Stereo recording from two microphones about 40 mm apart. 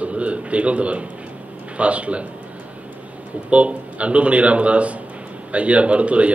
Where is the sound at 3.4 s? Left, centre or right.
Right.